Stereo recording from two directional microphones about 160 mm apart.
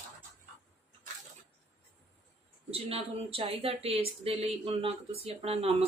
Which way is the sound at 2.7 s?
35° right (ahead or behind).